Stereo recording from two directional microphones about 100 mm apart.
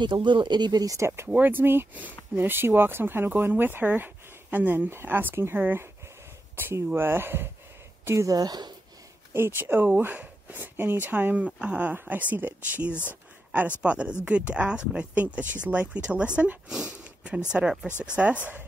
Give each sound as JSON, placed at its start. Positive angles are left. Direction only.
{"t": 0.0, "sound": "speech", "side_deg": -50}
{"t": 9.3, "sound": "speech", "side_deg": -20}
{"t": 12.9, "sound": "speech", "side_deg": 20}
{"t": 13.5, "sound": "speech", "side_deg": -15}